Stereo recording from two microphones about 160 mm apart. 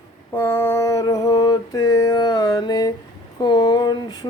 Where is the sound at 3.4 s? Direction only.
25° left (ahead or behind).